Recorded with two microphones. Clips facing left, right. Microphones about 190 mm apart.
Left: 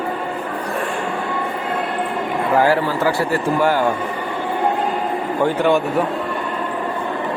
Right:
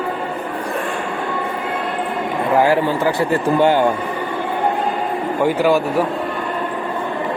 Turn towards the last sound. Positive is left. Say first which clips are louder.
# right 1 dB
turn(degrees=-5)  # may be behind; listen again after turning